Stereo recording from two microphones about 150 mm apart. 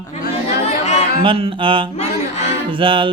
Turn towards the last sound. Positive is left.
turn(degrees=-35)  # may be behind; listen again after turning